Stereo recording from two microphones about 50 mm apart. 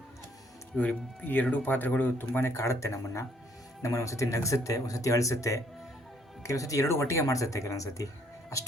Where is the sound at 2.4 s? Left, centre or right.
Left.